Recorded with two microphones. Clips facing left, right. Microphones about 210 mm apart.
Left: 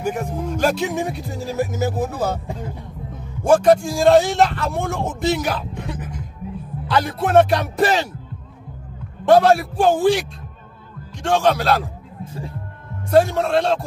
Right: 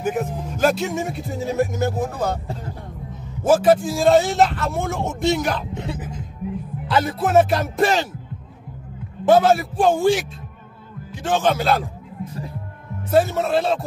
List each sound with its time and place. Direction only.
0.0 s speech: centre (ahead or behind)
3.4 s speech: 5° right (ahead or behind)
5.8 s music: 20° right (ahead or behind)
6.9 s speech: centre (ahead or behind)
9.2 s speech: centre (ahead or behind)
11.2 s speech: centre (ahead or behind)
13.1 s speech: centre (ahead or behind)